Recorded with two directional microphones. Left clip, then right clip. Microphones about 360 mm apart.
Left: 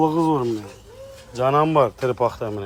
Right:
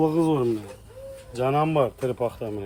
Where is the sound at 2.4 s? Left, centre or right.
Left.